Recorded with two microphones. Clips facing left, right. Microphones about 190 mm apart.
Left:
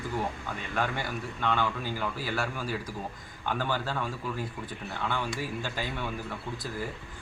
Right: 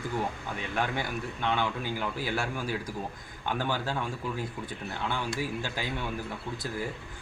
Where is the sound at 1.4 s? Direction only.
15° right (ahead or behind).